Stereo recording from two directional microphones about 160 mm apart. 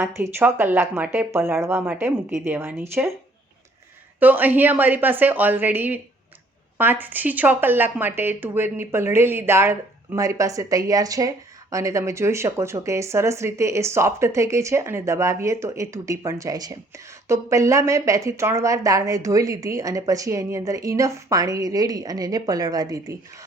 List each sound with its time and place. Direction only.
0.0 s speech: 15° right (ahead or behind)
4.2 s speech: 10° right (ahead or behind)